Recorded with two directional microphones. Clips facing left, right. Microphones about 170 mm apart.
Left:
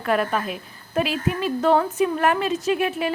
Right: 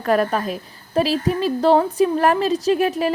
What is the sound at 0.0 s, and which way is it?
A woman's voice, 40° right (ahead or behind).